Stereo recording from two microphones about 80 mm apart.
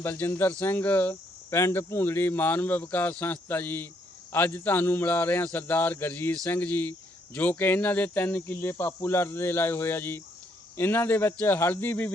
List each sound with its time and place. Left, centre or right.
0.0 s speech: left